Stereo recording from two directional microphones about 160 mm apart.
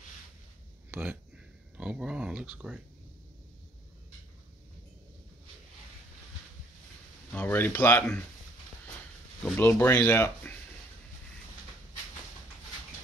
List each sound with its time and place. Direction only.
1.8 s speech: 5° right (ahead or behind)
7.3 s speech: 10° left (ahead or behind)
9.4 s speech: 5° left (ahead or behind)